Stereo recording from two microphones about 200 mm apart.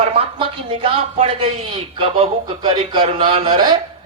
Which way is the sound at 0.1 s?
25° right (ahead or behind).